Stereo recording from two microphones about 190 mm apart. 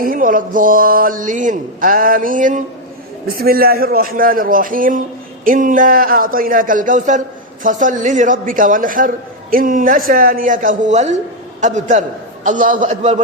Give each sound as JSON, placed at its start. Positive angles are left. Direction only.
{"t": 0.0, "sound": "a man's voice", "side_deg": -45}